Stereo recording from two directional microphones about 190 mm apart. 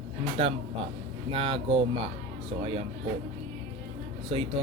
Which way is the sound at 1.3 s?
30° right (ahead or behind).